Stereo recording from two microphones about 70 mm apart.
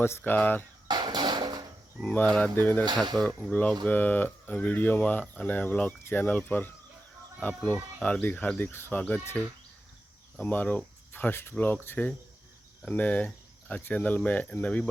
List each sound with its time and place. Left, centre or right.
0.0 s speech: left
0.9 s a sound: right
2.0 s speech: left
2.8 s speech: right
3.2 s speech: left
9.0 s speech: left
10.4 s speech: left